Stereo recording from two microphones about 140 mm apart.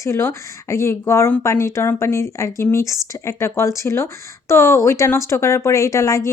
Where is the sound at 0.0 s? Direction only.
20° left (ahead or behind).